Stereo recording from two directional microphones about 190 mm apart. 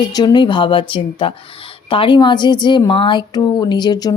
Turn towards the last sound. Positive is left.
turn(degrees=20)  # may be behind; listen again after turning